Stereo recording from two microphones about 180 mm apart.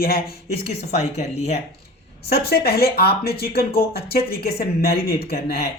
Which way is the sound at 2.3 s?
60° left (ahead or behind).